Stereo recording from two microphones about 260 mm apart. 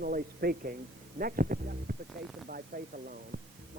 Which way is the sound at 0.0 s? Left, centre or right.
Right.